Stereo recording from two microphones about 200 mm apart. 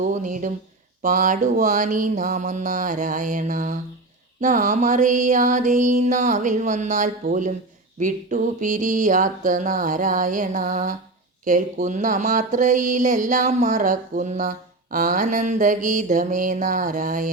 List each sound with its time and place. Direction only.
0.0 s speech: 40° right (ahead or behind)